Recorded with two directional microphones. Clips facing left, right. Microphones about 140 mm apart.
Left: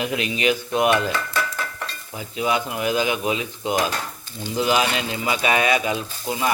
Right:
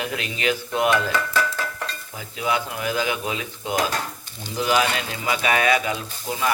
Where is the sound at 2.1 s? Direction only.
20° left (ahead or behind).